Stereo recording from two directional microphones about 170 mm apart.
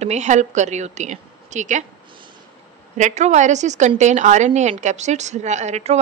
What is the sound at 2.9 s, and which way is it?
A woman's voice, 45° right (ahead or behind).